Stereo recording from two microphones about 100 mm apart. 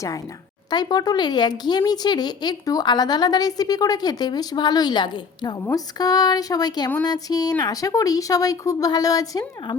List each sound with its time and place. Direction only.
0.7 s speech: 45° left (ahead or behind)
5.5 s speech: 35° left (ahead or behind)